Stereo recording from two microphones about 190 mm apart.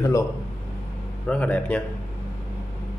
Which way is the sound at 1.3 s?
5° left (ahead or behind).